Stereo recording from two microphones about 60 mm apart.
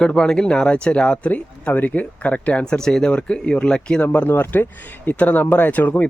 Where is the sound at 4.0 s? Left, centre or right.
Left.